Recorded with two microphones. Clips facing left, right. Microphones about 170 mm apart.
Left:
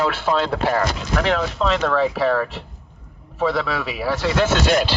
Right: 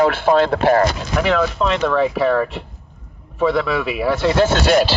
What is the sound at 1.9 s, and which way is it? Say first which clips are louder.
Speech: right 2 dB; 55° right (ahead or behind).